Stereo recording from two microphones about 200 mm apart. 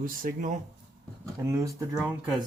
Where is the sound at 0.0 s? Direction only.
45° right (ahead or behind).